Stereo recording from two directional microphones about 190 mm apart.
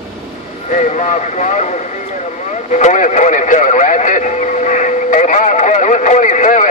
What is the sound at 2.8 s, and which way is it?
Speech, 40° left (ahead or behind).